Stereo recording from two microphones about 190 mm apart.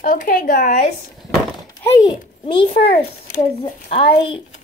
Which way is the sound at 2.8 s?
50° left (ahead or behind).